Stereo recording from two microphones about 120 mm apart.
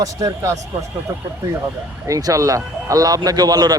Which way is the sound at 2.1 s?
25° right (ahead or behind).